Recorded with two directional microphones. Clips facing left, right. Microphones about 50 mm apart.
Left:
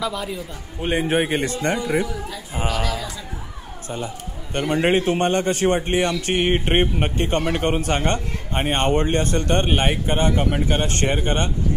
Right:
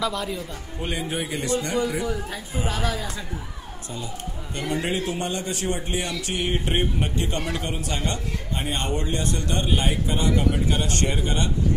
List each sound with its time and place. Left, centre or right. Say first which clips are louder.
0.0 s a man's voice: left 1 dB; centre
0.9 s a man's voice: left 10 dB; left
4.6 s a man's voice: left 7 dB; left